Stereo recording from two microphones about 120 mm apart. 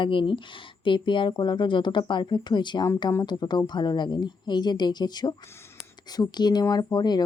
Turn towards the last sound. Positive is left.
turn(degrees=35)  # may be behind; listen again after turning